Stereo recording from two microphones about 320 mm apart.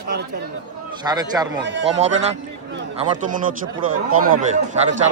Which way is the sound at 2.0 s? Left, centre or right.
Right.